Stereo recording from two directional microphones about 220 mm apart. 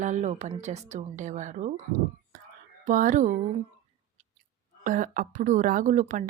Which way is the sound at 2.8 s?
35° right (ahead or behind).